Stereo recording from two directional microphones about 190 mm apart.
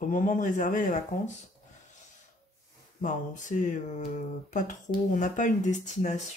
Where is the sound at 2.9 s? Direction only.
40° left (ahead or behind).